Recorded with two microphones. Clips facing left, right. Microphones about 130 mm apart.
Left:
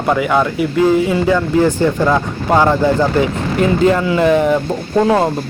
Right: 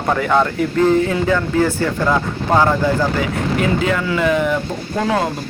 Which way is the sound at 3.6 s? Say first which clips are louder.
Left 8 dB; 35° left (ahead or behind).